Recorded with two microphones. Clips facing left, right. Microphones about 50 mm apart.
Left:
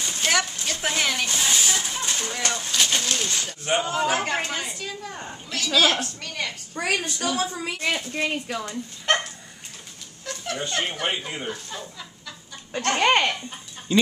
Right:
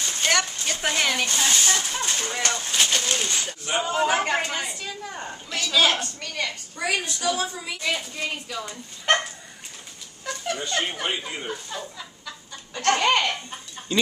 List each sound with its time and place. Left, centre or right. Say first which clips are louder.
0.1 s a sound: even; centre
2.4 s a woman's voice: even; centre
6.8 s a woman's voice: left 1 dB; left
8.6 s a woman's voice: right 3 dB; centre
10.2 s a sound: right 2 dB; centre
10.7 s a woman's voice: even; centre
11.0 s speech: left 1 dB; centre
11.4 s speech: right 1 dB; centre
12.7 s speech: even; left